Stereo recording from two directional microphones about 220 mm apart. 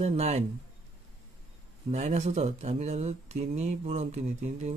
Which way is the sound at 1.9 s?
30° right (ahead or behind).